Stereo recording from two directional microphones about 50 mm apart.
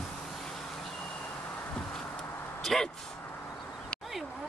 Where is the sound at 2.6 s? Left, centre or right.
Centre.